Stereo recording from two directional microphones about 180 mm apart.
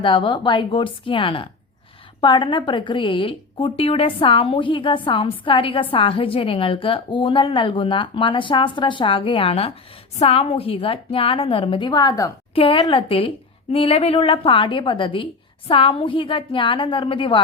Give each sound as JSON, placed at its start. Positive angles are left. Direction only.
{"t": 0.0, "sound": "a woman's voice", "side_deg": 25}